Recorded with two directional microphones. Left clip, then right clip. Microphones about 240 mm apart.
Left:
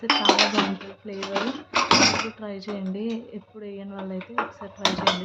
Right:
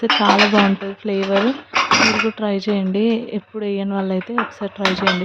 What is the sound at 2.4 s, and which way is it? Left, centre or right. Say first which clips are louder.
Speech: right 13 dB; right.